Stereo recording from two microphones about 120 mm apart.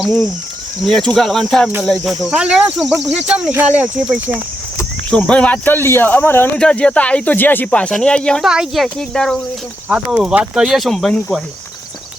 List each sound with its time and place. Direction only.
0.0 s speech: centre (ahead or behind)
5.1 s speech: 10° left (ahead or behind)
8.4 s speech: 5° right (ahead or behind)
9.9 s speech: 5° right (ahead or behind)